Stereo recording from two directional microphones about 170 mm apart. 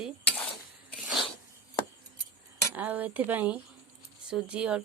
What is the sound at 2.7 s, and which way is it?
A woman's voice, 10° right (ahead or behind).